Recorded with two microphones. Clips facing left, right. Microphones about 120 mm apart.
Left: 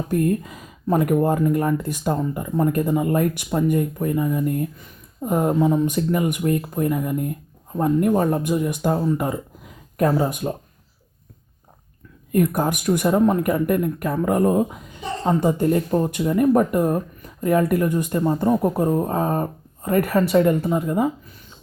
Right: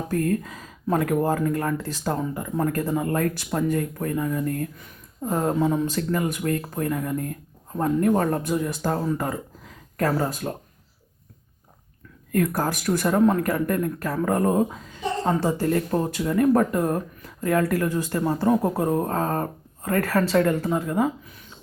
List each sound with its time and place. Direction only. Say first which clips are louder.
0.1 s speech: left 3 dB; 15° left (ahead or behind)
12.3 s a woman's voice: left 3 dB; 15° left (ahead or behind)